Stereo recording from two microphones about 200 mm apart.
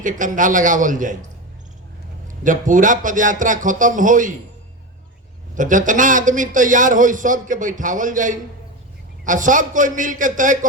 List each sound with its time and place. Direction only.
0.0 s a man's voice: 40° right (ahead or behind)
2.2 s a man's voice: 40° right (ahead or behind)
5.5 s a man's voice: 40° right (ahead or behind)